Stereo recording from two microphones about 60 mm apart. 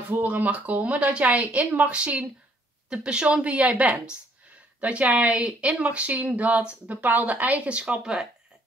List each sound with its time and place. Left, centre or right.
0.1 s a woman's voice: right; by 8.3 s centre